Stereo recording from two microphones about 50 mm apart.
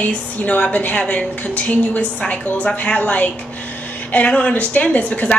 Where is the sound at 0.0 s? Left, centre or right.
Left.